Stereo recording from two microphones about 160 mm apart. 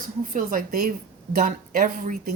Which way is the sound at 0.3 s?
55° right (ahead or behind).